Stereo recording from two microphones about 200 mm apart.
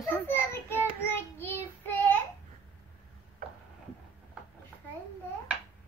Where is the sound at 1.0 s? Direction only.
10° left (ahead or behind).